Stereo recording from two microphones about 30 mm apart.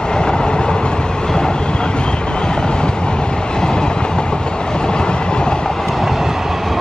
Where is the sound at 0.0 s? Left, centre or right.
Left.